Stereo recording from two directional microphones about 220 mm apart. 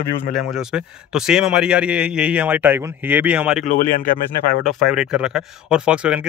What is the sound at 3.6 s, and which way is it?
Speech, 40° left (ahead or behind).